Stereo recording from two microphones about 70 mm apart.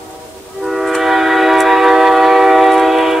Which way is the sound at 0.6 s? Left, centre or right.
Centre.